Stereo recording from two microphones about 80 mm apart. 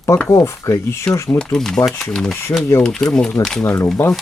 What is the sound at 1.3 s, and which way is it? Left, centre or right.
Speech, centre.